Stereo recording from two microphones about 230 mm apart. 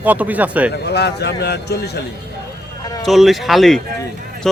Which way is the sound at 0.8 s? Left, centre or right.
Left.